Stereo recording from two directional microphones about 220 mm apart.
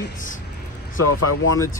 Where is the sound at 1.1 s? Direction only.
90° left.